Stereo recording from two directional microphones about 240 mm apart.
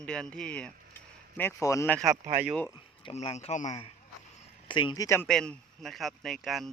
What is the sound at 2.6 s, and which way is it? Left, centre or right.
Speech, left.